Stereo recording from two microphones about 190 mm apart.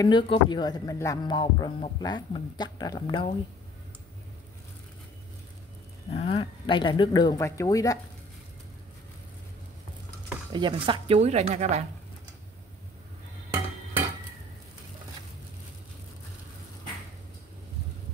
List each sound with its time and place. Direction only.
0.0 s speech: 25° left (ahead or behind)
6.1 s speech: 30° left (ahead or behind)
10.5 s speech: 25° right (ahead or behind)